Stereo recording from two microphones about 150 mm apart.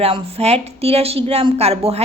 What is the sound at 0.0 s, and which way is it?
A woman's voice, 40° right (ahead or behind).